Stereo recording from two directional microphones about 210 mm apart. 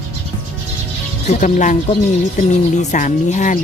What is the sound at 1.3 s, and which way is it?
Speech, 35° left (ahead or behind).